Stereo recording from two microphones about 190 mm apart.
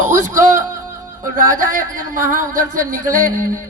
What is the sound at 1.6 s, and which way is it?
A woman's voice, 45° right (ahead or behind).